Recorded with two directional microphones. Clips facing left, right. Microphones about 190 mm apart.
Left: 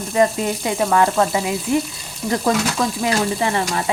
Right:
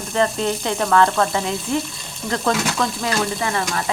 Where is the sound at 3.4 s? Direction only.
20° left (ahead or behind).